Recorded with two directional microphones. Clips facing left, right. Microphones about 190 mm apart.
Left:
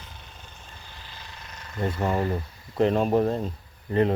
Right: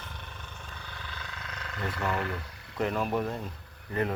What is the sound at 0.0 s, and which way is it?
Vehicle, 60° right (ahead or behind).